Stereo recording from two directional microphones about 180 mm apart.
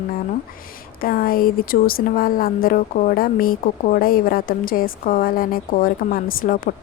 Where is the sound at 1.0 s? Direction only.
55° left (ahead or behind).